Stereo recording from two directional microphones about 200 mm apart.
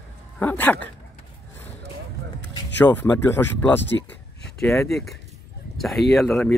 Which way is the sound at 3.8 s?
60° left (ahead or behind).